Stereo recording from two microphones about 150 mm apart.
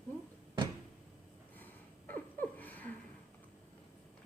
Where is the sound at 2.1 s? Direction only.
10° left (ahead or behind).